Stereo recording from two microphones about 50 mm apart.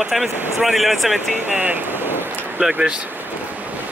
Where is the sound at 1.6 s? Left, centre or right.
Right.